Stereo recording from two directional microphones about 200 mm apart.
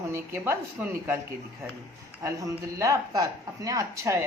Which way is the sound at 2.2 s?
15° right (ahead or behind).